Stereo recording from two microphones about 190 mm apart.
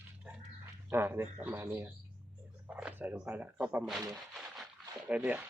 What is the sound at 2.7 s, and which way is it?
Speech, 5° right (ahead or behind).